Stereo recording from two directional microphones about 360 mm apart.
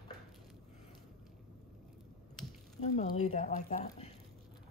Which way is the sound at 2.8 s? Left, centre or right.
Centre.